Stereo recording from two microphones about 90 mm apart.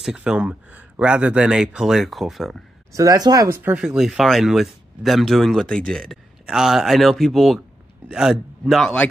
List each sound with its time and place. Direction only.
0.0 s speech: 10° right (ahead or behind)
2.9 s speech: 40° right (ahead or behind)
3.4 s speech: 25° right (ahead or behind)
3.7 s speech: 5° right (ahead or behind)
6.4 s speech: 5° right (ahead or behind)